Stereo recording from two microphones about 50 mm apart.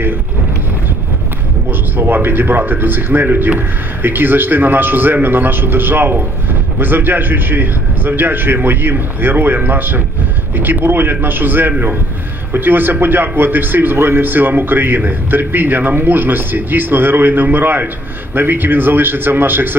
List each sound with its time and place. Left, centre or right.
1.7 s a man's voice: right